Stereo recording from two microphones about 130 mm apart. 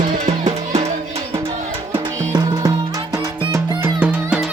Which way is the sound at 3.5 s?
20° right (ahead or behind).